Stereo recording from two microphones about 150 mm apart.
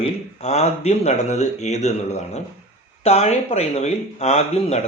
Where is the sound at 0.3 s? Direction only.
45° left (ahead or behind).